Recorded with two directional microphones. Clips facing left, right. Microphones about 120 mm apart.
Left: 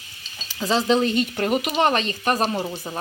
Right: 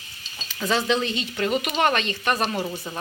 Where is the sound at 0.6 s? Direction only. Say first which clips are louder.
Left 3 dB; 30° left (ahead or behind).